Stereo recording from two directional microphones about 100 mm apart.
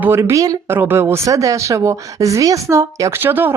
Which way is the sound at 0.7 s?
25° right (ahead or behind).